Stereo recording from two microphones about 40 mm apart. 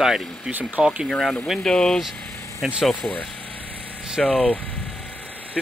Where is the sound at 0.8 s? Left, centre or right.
Right.